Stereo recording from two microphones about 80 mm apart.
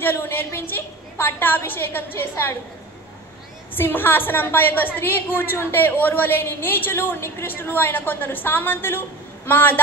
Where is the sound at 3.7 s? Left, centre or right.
Left.